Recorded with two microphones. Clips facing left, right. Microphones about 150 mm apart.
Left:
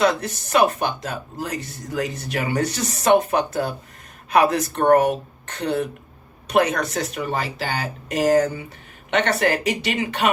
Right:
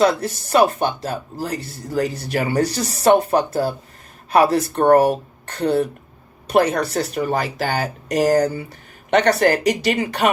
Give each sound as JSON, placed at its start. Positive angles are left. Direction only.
{"t": 0.0, "sound": "speech", "side_deg": -35}